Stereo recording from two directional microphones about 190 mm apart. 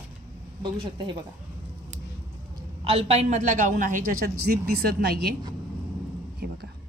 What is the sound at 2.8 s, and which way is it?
A man's voice, 35° right (ahead or behind).